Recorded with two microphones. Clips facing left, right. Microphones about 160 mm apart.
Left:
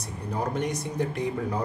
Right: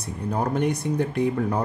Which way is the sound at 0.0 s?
60° right (ahead or behind).